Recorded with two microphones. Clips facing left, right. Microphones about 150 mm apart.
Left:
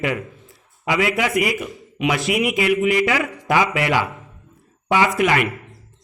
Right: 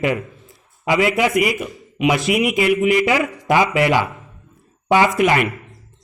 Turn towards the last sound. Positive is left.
turn(degrees=-30)  # may be behind; listen again after turning